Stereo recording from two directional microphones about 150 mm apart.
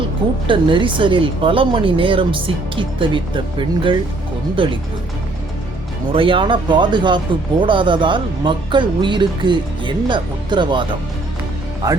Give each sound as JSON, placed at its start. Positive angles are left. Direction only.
{"t": 0.4, "sound": "speech", "side_deg": -35}
{"t": 6.1, "sound": "speech", "side_deg": -35}
{"t": 11.8, "sound": "speech", "side_deg": -25}